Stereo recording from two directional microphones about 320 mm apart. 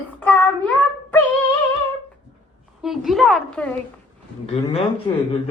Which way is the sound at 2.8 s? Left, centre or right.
Centre.